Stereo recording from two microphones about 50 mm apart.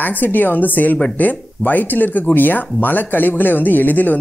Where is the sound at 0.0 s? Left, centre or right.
Left.